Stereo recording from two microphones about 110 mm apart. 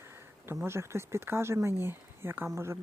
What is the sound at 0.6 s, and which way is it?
Speech, 25° right (ahead or behind).